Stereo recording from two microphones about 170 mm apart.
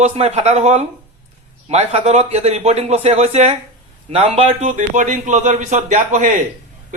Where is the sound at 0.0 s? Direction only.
40° right (ahead or behind).